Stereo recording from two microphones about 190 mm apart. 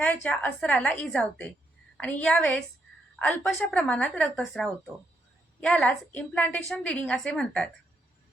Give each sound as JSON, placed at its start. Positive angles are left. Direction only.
{"t": 0.0, "sound": "a woman's voice", "side_deg": 5}